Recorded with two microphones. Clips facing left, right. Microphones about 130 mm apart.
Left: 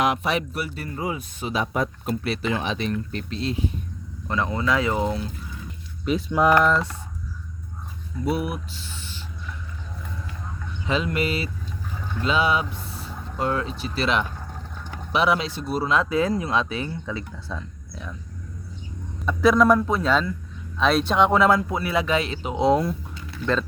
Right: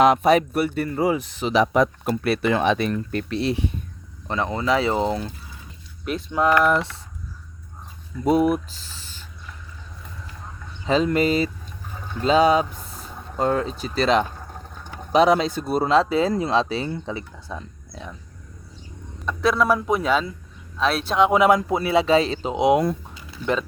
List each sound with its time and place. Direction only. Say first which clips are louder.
0.0 s speech: right 7 dB; 40° right (ahead or behind); by 3.7 s 70° right (ahead or behind)
4.3 s speech: right 2 dB; 25° right (ahead or behind)
6.1 s speech: left 1 dB; 5° left (ahead or behind)
8.2 s speech: right 7 dB; 40° right (ahead or behind)
10.8 s speech: right 5 dB; 35° right (ahead or behind)
15.9 s speech: right 3 dB; 30° right (ahead or behind)
17.5 s speech: right 1 dB; 15° right (ahead or behind)
19.2 s speech: left 3 dB; centre (ahead or behind)
21.3 s speech: right 2 dB; 15° right (ahead or behind); by 22.5 s 35° right (ahead or behind)
22.5 s speech: right 2 dB; 15° right (ahead or behind)